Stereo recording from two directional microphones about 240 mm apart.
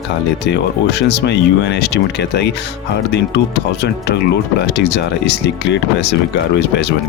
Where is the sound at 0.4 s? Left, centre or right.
Left.